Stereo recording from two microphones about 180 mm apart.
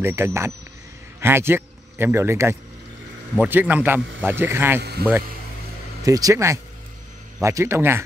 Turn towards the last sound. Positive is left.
turn(degrees=-15)  # may be behind; listen again after turning